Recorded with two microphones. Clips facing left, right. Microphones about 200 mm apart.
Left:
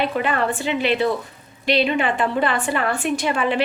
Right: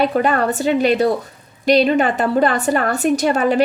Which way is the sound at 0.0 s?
45° right (ahead or behind).